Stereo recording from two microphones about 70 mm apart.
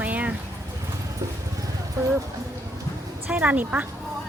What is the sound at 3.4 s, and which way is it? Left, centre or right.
Speech, right.